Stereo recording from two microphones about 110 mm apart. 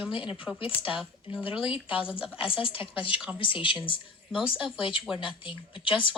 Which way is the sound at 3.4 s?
50° left (ahead or behind).